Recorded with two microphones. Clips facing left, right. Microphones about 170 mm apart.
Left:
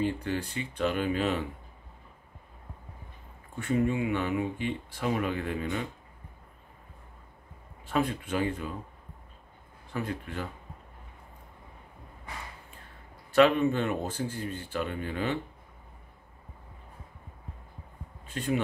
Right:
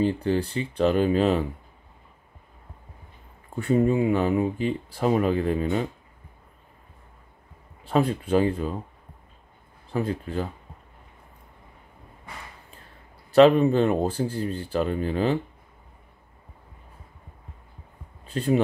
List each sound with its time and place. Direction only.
0.0 s speech: 30° right (ahead or behind)
3.5 s speech: 35° right (ahead or behind)
7.8 s speech: 35° right (ahead or behind)
9.9 s speech: 30° right (ahead or behind)
13.3 s speech: 30° right (ahead or behind)
18.2 s speech: 35° right (ahead or behind)